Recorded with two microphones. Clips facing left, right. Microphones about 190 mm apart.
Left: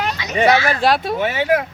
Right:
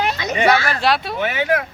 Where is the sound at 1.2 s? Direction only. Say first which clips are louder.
Left 2 dB; 30° left (ahead or behind).